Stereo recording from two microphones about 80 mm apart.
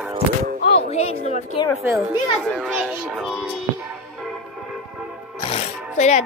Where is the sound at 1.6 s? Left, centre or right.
Left.